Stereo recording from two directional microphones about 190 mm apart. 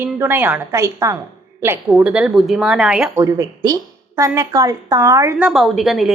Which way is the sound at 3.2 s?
15° right (ahead or behind).